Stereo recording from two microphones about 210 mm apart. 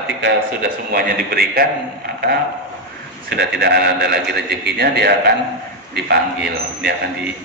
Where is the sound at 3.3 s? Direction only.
50° right (ahead or behind).